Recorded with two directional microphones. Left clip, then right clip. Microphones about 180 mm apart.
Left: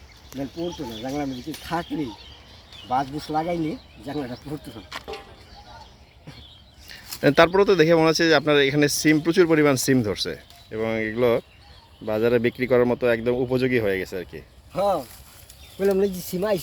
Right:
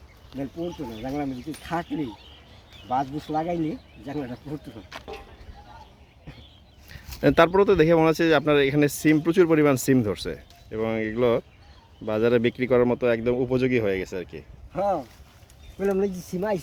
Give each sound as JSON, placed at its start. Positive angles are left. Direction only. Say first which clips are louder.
{"t": 0.7, "sound": "speech", "louder": "left 2 dB", "side_deg": 15}
{"t": 1.0, "sound": "speech", "louder": "left 1 dB", "side_deg": -5}
{"t": 6.8, "sound": "speech", "louder": "left 1 dB", "side_deg": -5}
{"t": 14.7, "sound": "speech", "louder": "left 3 dB", "side_deg": 40}